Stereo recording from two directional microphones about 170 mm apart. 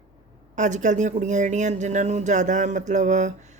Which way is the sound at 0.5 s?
45° right (ahead or behind).